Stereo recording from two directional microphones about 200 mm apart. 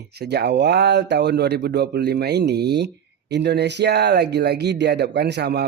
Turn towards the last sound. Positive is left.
turn(degrees=-55)  # may be behind; listen again after turning